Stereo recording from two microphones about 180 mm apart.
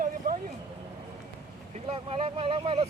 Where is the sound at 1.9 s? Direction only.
30° right (ahead or behind).